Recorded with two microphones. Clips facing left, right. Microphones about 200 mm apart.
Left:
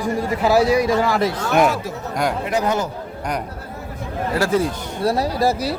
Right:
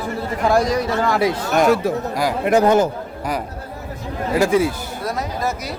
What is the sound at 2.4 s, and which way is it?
Speech, 50° right (ahead or behind).